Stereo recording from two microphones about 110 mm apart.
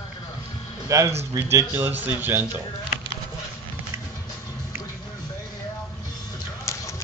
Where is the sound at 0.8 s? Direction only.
30° right (ahead or behind).